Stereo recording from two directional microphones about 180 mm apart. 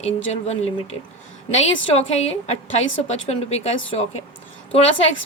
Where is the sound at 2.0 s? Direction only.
35° left (ahead or behind).